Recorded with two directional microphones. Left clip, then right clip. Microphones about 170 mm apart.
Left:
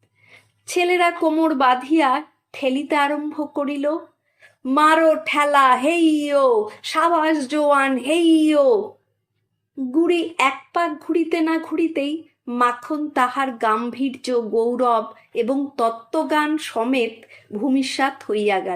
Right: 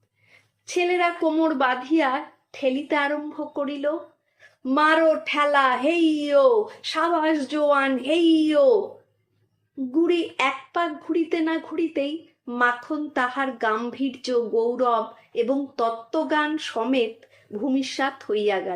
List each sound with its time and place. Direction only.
0.3 s speech: 40° left (ahead or behind)